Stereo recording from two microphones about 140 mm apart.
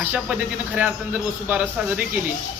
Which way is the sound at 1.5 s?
10° right (ahead or behind).